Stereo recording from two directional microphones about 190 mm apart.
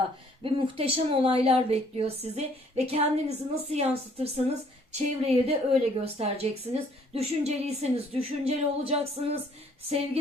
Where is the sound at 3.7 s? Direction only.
30° right (ahead or behind).